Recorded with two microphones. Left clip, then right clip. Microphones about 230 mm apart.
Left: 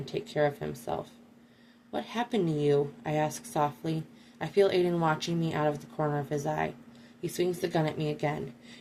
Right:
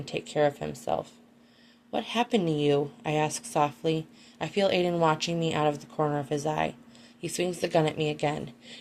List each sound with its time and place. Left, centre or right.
0.0 s speech: right